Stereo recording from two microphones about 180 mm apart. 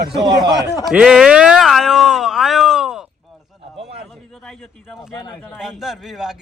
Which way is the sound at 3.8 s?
35° right (ahead or behind).